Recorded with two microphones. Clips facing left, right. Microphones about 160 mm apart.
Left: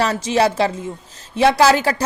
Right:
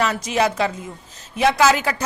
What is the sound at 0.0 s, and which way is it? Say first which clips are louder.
Speech: left 3 dB; 30° left (ahead or behind).